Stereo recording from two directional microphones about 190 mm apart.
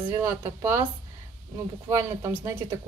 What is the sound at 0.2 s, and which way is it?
Speech, 10° right (ahead or behind).